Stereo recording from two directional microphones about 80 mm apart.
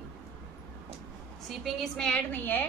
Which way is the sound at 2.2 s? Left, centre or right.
Left.